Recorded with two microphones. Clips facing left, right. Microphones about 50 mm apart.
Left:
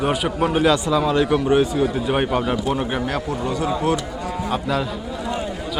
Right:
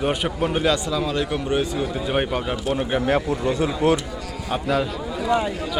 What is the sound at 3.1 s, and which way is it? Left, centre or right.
Speech, right.